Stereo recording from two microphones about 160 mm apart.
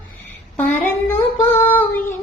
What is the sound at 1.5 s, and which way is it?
Child singing, 15° left (ahead or behind).